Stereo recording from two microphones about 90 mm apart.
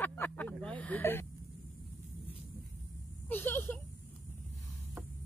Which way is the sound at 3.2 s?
20° left (ahead or behind).